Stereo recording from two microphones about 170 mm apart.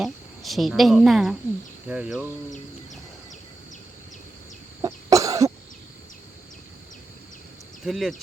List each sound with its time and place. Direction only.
0.0 s speech: centre (ahead or behind)
4.8 s cough: 20° right (ahead or behind)
7.9 s speech: centre (ahead or behind)